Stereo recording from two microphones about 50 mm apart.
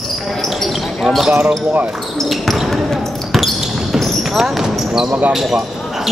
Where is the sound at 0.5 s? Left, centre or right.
Centre.